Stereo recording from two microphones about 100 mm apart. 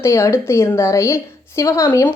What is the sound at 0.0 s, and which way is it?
A woman's voice, 30° left (ahead or behind).